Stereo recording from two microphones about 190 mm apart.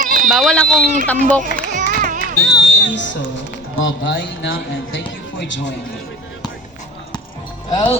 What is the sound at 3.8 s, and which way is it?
Speech, 85° left.